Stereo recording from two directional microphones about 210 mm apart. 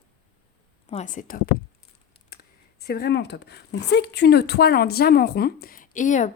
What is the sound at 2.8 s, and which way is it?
A woman's voice, 50° left (ahead or behind).